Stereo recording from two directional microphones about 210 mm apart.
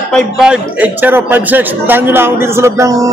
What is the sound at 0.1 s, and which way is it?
A man's voice, 5° right (ahead or behind).